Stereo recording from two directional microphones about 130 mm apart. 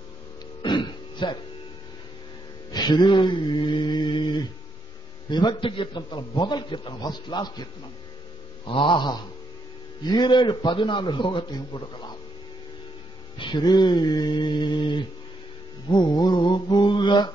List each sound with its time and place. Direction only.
0.6 s throat clearing: 35° left (ahead or behind)
2.7 s a man's voice: 35° left (ahead or behind)
8.6 s a man's voice: 40° left (ahead or behind)
13.4 s a man's voice: 35° left (ahead or behind)